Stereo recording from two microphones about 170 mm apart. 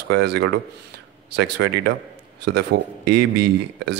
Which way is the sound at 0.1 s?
80° right.